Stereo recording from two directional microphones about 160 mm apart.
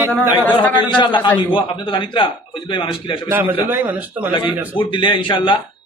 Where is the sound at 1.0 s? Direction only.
30° left (ahead or behind).